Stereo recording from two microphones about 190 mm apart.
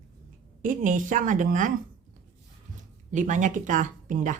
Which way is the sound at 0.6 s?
45° right (ahead or behind).